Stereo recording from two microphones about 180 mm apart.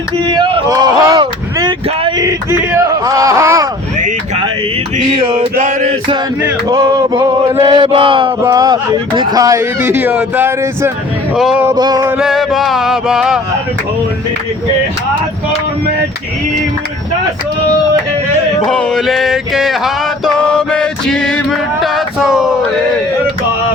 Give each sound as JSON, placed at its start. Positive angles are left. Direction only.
{"t": 0.3, "sound": "a sound", "side_deg": -25}
{"t": 6.4, "sound": "male singing", "side_deg": -15}
{"t": 8.4, "sound": "speech", "side_deg": -20}
{"t": 11.3, "sound": "male singing", "side_deg": 0}
{"t": 11.6, "sound": "male singing", "side_deg": -20}
{"t": 12.1, "sound": "male singing", "side_deg": 0}
{"t": 18.6, "sound": "male singing", "side_deg": 5}